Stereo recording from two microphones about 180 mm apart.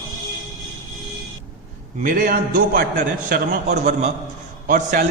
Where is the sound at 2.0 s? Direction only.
50° right (ahead or behind).